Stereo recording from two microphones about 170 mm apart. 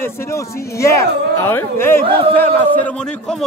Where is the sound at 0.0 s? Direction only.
15° left (ahead or behind).